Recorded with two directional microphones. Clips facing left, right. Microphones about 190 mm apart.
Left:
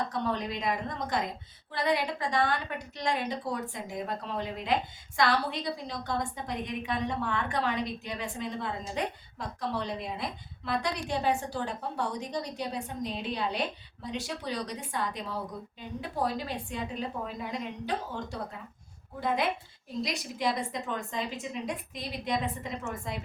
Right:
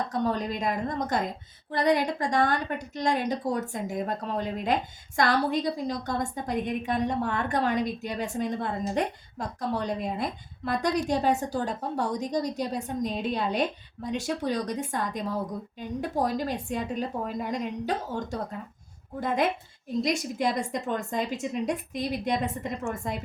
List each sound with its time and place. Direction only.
0.1 s a woman's voice: 45° right (ahead or behind)
20.0 s a woman's voice: 50° right (ahead or behind)